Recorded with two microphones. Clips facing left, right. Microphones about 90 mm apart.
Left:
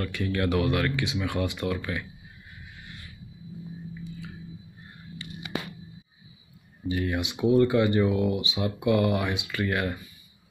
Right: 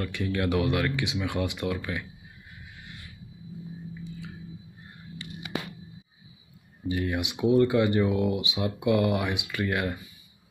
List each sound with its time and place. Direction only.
0.0 s speech: 15° right (ahead or behind)
2.8 s a sound: 15° right (ahead or behind)
6.9 s speech: 10° right (ahead or behind)